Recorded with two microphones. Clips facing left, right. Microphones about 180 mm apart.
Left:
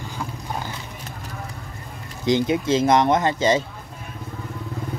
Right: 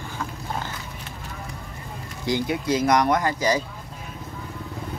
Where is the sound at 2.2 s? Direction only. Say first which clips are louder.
Left 5 dB; 20° left (ahead or behind).